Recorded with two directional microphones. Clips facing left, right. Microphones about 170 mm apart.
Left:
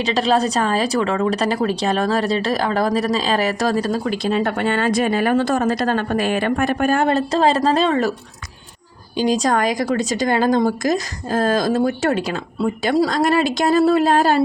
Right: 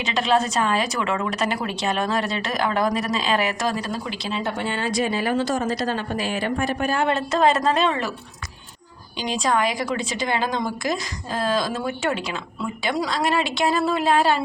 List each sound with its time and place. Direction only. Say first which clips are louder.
0.0 s a woman's voice: left 4 dB; 35° left (ahead or behind)
9.1 s speech: left 5 dB; 40° left (ahead or behind)